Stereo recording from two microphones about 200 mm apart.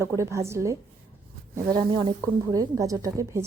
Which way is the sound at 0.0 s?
15° right (ahead or behind).